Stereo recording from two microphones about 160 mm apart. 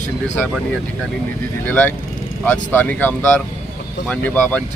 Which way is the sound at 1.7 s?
10° left (ahead or behind).